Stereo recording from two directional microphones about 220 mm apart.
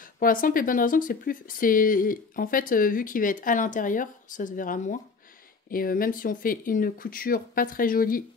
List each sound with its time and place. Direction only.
0.0 s speech: 40° left (ahead or behind)